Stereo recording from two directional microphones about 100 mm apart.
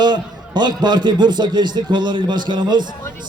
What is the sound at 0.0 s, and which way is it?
A man's voice, 45° right (ahead or behind).